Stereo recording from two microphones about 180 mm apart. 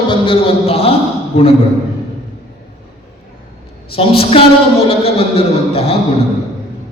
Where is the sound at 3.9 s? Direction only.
30° left (ahead or behind).